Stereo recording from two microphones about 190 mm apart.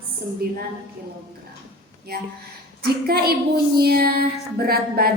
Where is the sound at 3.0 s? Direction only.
55° right (ahead or behind).